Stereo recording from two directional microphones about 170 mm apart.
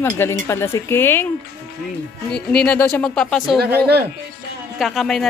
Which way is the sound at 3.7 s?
70° right (ahead or behind).